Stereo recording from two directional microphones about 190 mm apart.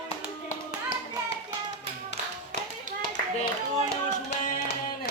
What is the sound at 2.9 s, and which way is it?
Clapping, 40° right (ahead or behind).